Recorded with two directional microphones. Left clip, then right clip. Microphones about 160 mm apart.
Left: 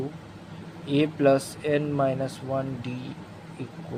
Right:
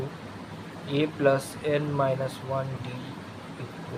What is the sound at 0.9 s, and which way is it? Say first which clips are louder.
Speech: left 2 dB; 50° left (ahead or behind).